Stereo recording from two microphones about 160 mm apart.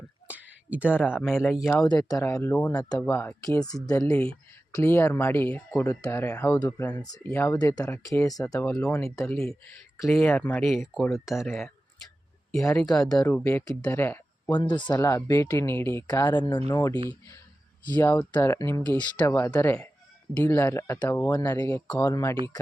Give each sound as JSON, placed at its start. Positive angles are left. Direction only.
{"t": 0.3, "sound": "a sound", "side_deg": -10}
{"t": 1.5, "sound": "speech", "side_deg": 0}
{"t": 1.8, "sound": "speech", "side_deg": 25}
{"t": 3.0, "sound": "speech", "side_deg": 10}
{"t": 7.3, "sound": "speech", "side_deg": 10}
{"t": 7.5, "sound": "speech", "side_deg": 25}
{"t": 10.1, "sound": "speech", "side_deg": 5}
{"t": 12.7, "sound": "speech", "side_deg": 5}
{"t": 13.2, "sound": "speech", "side_deg": 15}
{"t": 14.5, "sound": "speech", "side_deg": 30}
{"t": 14.9, "sound": "speech", "side_deg": 15}
{"t": 16.9, "sound": "speech", "side_deg": -30}
{"t": 17.8, "sound": "speech", "side_deg": 10}